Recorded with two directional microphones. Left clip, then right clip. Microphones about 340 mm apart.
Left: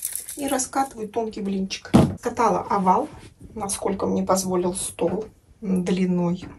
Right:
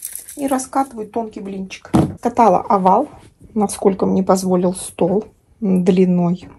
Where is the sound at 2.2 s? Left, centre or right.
Centre.